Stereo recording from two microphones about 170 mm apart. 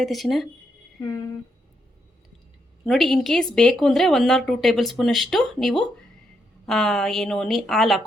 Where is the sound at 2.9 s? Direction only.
Centre (ahead or behind).